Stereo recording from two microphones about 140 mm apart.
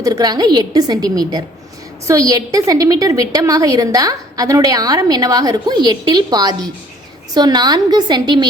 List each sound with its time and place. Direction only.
0.0 s a woman's voice: 25° right (ahead or behind)